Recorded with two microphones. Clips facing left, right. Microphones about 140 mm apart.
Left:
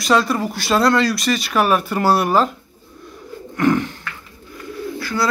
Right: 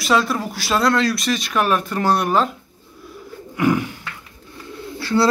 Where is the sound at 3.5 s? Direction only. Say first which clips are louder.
Left 2 dB; 10° right (ahead or behind).